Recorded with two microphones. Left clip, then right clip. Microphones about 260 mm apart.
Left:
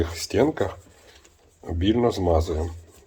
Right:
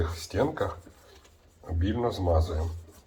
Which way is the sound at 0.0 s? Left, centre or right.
Left.